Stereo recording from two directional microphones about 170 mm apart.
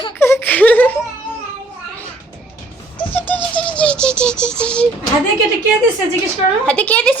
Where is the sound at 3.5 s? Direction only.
5° left (ahead or behind).